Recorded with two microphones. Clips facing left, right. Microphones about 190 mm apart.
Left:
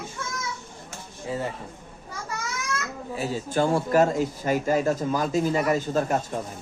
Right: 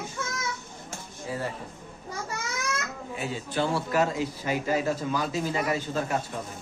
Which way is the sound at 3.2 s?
40° left (ahead or behind).